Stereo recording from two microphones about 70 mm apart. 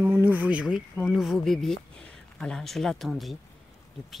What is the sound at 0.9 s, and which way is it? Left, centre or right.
Speech, centre.